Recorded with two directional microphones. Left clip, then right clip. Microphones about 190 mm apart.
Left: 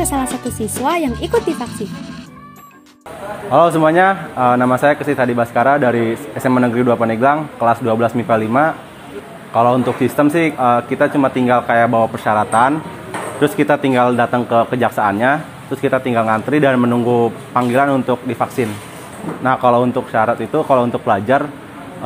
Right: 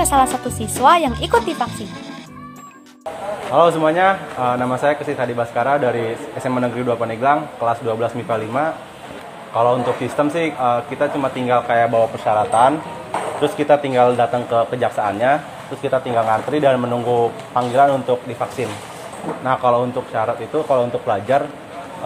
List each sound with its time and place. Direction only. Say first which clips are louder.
0.0 s speech: right 4 dB; 20° left (ahead or behind)
3.5 s speech: left 3 dB; 50° left (ahead or behind)